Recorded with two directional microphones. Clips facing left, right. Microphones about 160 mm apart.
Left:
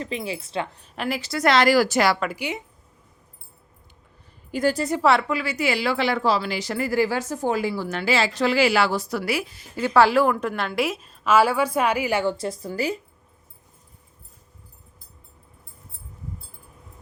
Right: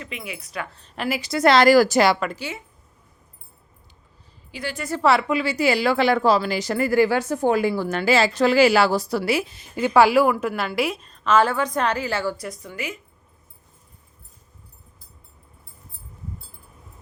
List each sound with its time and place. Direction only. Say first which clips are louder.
0.0 s speech: left 6 dB; 30° left (ahead or behind)
0.9 s a woman's voice: right 1 dB; 5° right (ahead or behind)
1.2 s a woman's voice: right 3 dB; 20° right (ahead or behind)
1.5 s speech: right 4 dB; 40° right (ahead or behind)
2.3 s speech: left 2 dB; 15° left (ahead or behind)
4.5 s a woman's voice: left 9 dB; 40° left (ahead or behind)
5.3 s a woman's voice: right 4 dB; 25° right (ahead or behind); by 13.0 s 35° left (ahead or behind)